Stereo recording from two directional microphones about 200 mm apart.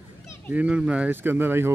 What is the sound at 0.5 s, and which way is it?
Speech, 5° right (ahead or behind).